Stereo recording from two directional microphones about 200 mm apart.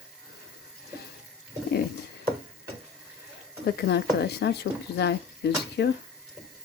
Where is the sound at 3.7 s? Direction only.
55° left (ahead or behind).